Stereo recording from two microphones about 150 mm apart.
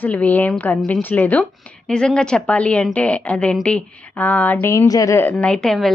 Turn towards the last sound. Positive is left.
turn(degrees=0)  # may be behind; listen again after turning